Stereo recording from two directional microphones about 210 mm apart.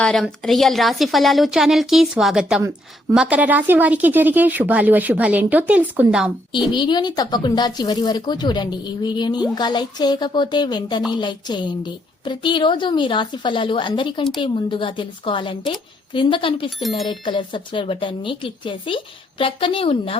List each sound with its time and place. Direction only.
0.0 s a woman's voice: centre (ahead or behind)
6.7 s speech: 20° left (ahead or behind)
16.6 s speech: centre (ahead or behind)
17.1 s speech: 20° left (ahead or behind)